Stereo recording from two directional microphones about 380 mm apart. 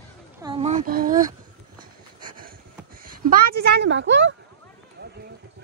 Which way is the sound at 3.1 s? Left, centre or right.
Right.